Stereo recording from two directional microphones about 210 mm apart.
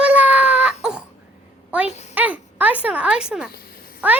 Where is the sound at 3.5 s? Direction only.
45° left (ahead or behind).